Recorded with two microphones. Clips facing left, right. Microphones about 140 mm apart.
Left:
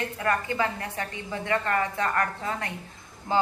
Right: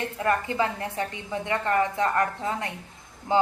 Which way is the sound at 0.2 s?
25° right (ahead or behind).